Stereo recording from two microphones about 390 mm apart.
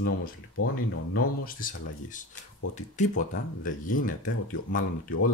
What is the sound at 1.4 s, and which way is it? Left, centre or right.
Speech, centre.